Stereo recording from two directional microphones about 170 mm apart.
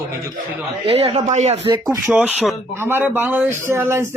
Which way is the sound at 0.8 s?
35° right (ahead or behind).